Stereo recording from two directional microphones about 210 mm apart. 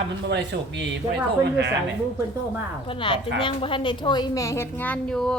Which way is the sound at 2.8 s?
25° left (ahead or behind).